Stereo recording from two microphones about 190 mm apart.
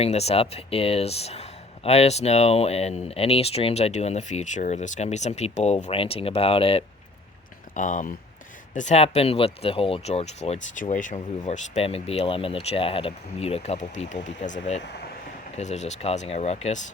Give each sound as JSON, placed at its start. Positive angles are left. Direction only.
{"t": 0.0, "sound": "speech", "side_deg": 35}
{"t": 7.7, "sound": "speech", "side_deg": 40}